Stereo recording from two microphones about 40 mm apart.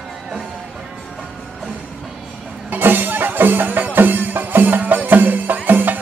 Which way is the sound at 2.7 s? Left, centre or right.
Right.